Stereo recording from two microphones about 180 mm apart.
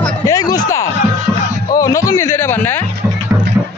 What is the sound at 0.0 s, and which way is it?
Music, 20° left (ahead or behind).